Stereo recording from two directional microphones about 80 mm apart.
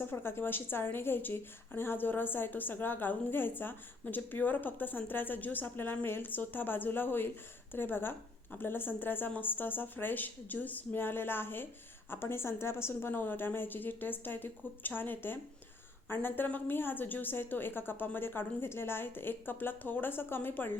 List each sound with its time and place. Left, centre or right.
0.0 s a woman's voice: left